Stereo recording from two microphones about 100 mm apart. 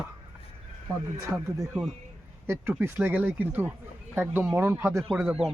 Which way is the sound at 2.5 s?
25° right (ahead or behind).